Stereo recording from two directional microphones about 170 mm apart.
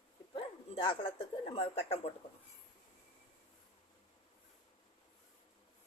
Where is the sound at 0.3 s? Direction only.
30° left (ahead or behind).